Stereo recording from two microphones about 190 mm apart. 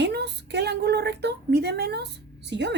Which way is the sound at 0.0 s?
60° right (ahead or behind).